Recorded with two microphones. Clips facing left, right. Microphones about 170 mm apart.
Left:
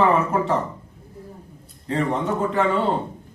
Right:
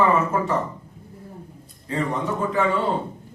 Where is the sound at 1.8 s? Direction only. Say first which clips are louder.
Left 2 dB; 65° left (ahead or behind).